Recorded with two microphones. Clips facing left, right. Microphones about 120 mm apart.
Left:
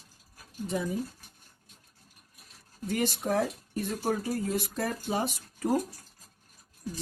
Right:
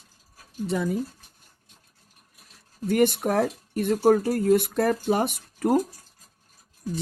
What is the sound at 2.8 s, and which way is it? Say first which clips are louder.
Speech: right 8 dB; 60° right (ahead or behind).